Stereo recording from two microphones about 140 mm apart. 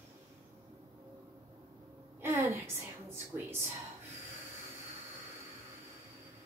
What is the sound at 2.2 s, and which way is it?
A woman's voice, 20° right (ahead or behind).